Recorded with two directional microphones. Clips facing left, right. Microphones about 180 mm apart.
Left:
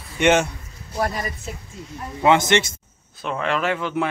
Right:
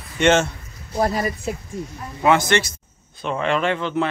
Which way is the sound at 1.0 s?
30° right (ahead or behind).